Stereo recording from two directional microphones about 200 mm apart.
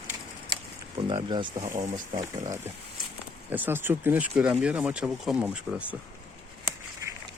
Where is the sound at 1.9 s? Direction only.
20° right (ahead or behind).